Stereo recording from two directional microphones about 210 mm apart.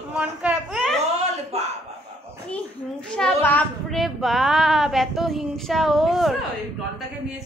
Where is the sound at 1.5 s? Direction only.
30° right (ahead or behind).